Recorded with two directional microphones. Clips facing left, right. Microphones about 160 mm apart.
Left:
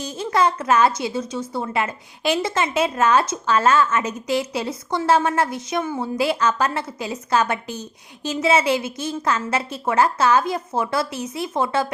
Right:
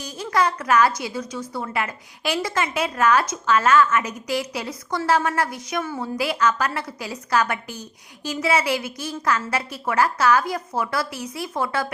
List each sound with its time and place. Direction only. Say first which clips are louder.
0.0 s a woman's voice: left 2 dB; 25° left (ahead or behind)